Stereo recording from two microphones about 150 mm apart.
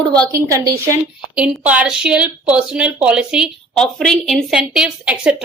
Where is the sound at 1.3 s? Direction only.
5° right (ahead or behind).